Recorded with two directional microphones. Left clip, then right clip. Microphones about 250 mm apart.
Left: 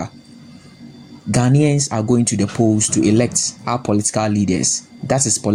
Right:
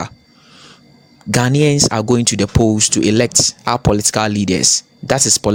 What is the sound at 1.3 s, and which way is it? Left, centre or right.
Speech, right.